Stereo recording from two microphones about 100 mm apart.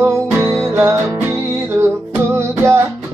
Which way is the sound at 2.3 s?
25° right (ahead or behind).